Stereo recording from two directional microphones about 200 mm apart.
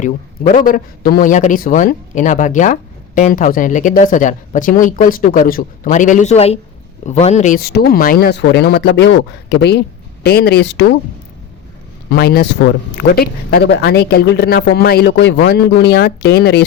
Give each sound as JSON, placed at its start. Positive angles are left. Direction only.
{"t": 0.0, "sound": "speech", "side_deg": 40}
{"t": 12.1, "sound": "speech", "side_deg": 50}